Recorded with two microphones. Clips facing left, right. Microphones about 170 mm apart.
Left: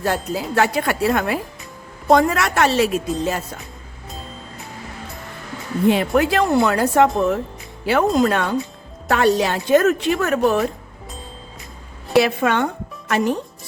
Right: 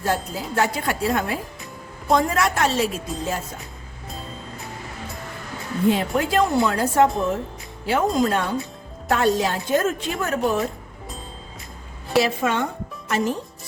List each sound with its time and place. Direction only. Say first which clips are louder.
0.0 s a woman's voice: left 3 dB; 70° left (ahead or behind)
5.9 s a woman's voice: left 4 dB; 70° left (ahead or behind)
12.1 s a woman's voice: left 4 dB; 60° left (ahead or behind)